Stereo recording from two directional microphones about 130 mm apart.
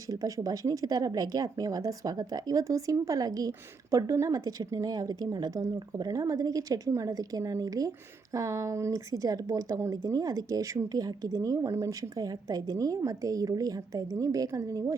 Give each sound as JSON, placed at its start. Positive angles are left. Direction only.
{"t": 0.1, "sound": "a woman's voice", "side_deg": -25}